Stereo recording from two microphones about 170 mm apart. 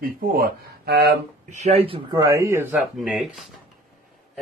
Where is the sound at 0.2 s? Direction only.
65° right (ahead or behind).